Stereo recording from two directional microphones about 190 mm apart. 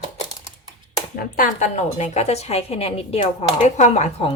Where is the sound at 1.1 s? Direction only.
45° left (ahead or behind).